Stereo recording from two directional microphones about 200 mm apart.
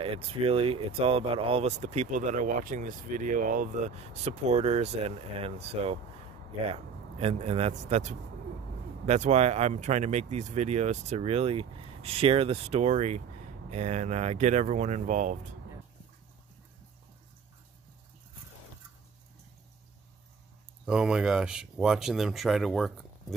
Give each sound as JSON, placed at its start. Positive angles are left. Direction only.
{"t": 0.0, "sound": "speech", "side_deg": -30}
{"t": 20.8, "sound": "speech", "side_deg": -5}